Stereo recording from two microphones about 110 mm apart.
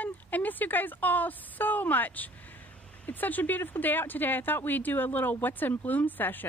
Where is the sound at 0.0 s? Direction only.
15° left (ahead or behind).